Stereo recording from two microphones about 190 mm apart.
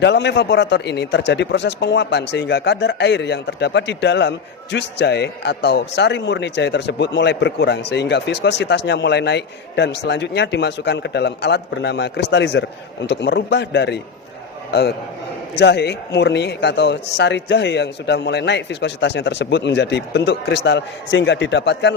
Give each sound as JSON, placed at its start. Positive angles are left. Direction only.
{"t": 0.0, "sound": "a man's voice", "side_deg": 65}